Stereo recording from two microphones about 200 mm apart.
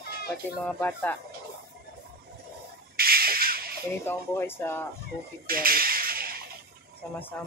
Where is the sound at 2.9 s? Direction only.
50° right (ahead or behind).